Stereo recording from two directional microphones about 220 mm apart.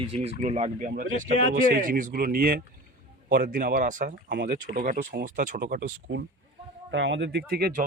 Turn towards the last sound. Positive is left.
turn(degrees=-45)  # may be behind; listen again after turning